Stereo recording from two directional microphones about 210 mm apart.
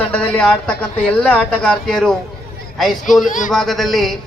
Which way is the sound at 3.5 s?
Centre (ahead or behind).